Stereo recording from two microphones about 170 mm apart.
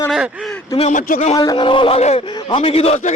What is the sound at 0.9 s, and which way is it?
Speech, 50° left (ahead or behind).